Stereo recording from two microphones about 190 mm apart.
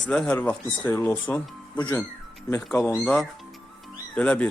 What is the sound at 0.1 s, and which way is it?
Speech, 5° left (ahead or behind).